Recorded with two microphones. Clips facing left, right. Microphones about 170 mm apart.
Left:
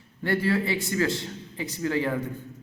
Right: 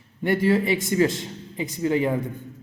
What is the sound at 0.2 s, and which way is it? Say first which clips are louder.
A man's voice: right 4 dB; 20° right (ahead or behind).